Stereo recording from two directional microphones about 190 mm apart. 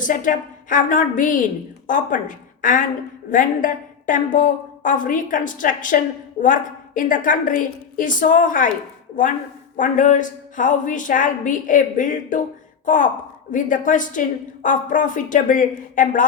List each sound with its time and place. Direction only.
0.0 s a woman's voice: 45° left (ahead or behind)
9.7 s a woman's voice: 45° left (ahead or behind)